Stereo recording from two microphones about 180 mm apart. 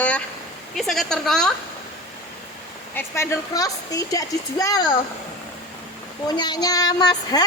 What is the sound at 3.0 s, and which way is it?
Speech, 15° left (ahead or behind).